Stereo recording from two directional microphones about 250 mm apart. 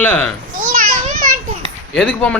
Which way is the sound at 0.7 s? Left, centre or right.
Right.